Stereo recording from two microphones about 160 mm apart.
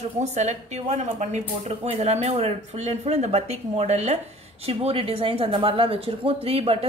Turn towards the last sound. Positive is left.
turn(degrees=-35)  # may be behind; listen again after turning